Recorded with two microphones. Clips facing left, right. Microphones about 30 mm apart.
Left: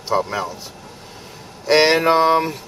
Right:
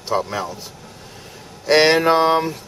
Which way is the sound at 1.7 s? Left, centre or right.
Centre.